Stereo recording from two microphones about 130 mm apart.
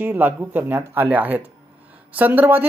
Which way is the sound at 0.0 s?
15° right (ahead or behind).